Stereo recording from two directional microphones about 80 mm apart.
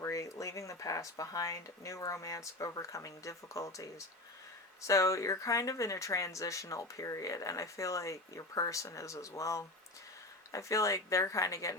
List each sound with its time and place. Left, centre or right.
0.0 s speech: left